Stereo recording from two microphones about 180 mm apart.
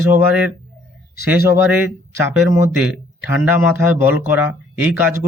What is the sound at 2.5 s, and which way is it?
Speech, 10° right (ahead or behind).